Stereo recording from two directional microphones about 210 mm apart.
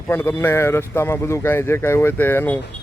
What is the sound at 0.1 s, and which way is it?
Speech, 10° left (ahead or behind).